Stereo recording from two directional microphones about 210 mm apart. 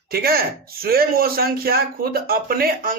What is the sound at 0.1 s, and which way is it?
Speech, 45° right (ahead or behind).